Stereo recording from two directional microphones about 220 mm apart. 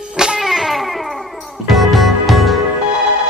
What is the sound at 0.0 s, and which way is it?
Music, 5° right (ahead or behind).